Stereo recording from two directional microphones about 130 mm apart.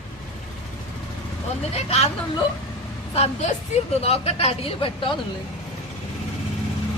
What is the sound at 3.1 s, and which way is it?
A woman's voice, 60° left (ahead or behind).